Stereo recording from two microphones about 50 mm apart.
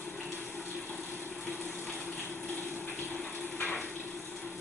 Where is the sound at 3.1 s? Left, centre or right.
Left.